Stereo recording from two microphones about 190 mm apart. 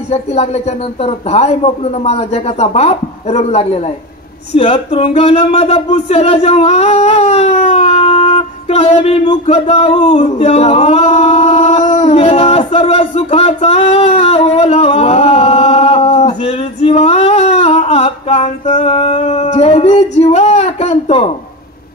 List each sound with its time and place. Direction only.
0.1 s a man's voice: 35° left (ahead or behind)
9.7 s singing: 30° left (ahead or behind)